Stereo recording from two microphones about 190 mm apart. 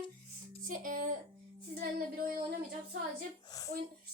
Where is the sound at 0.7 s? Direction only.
45° right (ahead or behind).